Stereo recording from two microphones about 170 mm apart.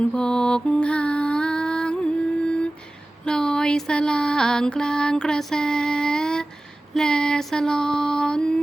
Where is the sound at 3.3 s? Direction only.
5° left (ahead or behind).